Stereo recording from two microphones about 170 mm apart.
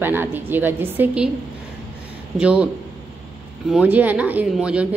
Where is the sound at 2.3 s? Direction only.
5° right (ahead or behind).